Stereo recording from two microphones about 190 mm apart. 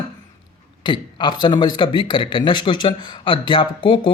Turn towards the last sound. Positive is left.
turn(degrees=25)  # may be behind; listen again after turning